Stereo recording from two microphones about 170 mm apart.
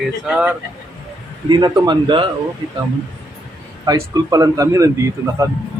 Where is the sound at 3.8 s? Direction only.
20° right (ahead or behind).